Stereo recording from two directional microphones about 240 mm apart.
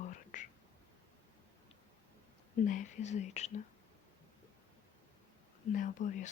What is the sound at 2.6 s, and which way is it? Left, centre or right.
Speech, left.